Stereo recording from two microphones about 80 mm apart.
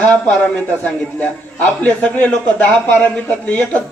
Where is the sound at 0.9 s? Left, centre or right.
Centre.